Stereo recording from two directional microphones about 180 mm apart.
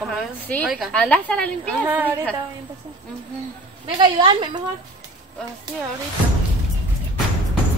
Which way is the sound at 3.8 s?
30° right (ahead or behind).